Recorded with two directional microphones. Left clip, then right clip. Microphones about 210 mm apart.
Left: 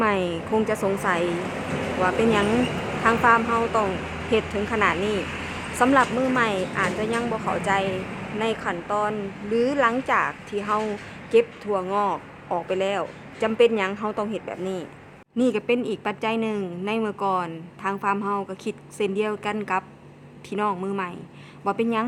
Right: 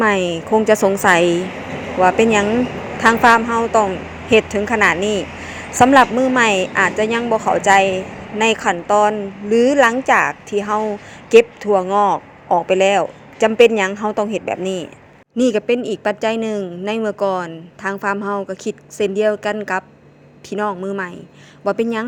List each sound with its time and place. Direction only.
0.0 s speech: 25° right (ahead or behind)